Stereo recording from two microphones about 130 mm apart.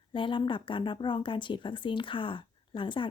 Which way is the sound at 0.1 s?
40° left (ahead or behind).